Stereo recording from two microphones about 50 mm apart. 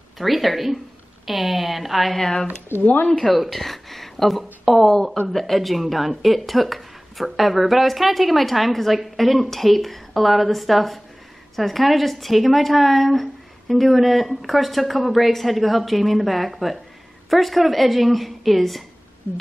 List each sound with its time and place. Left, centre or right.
0.2 s speech: centre
2.1 s speech: centre
2.8 s speech: left
3.1 s speech: centre